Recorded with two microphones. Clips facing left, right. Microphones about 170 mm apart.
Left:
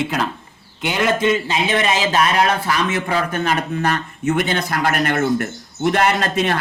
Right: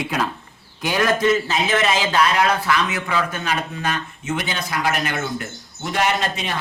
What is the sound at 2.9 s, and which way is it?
A man's voice, 50° left (ahead or behind).